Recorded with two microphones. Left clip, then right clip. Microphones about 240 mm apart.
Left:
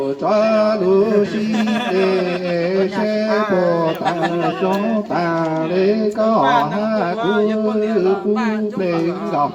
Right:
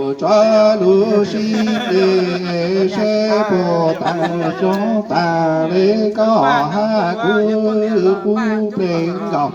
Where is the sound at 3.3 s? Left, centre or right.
Right.